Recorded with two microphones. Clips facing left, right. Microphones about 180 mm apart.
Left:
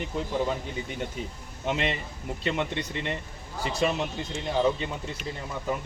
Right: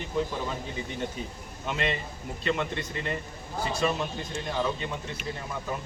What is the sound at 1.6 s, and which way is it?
A man's voice, 20° left (ahead or behind).